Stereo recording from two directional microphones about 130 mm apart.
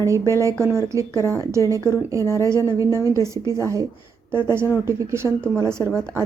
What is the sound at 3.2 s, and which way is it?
Speech, 20° right (ahead or behind).